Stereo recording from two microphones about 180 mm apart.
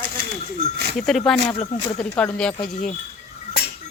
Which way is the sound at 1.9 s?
5° left (ahead or behind).